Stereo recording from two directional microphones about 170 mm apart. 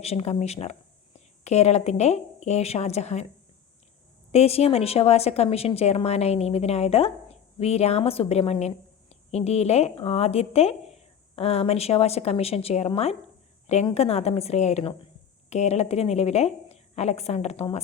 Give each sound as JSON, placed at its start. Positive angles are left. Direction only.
{"t": 0.0, "sound": "a woman's voice", "side_deg": 40}
{"t": 4.3, "sound": "a woman's voice", "side_deg": 35}